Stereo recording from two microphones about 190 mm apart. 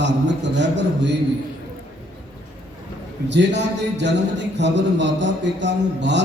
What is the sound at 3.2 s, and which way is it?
Speech, 65° right (ahead or behind).